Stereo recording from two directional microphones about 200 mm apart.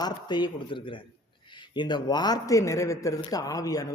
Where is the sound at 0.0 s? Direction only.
20° left (ahead or behind).